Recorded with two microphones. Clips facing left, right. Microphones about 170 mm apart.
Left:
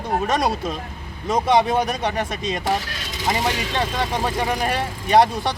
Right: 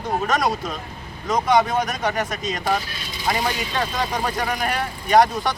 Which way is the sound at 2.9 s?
90° left.